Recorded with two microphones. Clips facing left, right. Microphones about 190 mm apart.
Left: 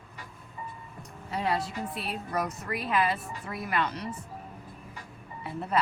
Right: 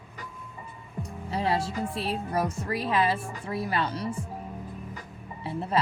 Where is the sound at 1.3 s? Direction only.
30° right (ahead or behind).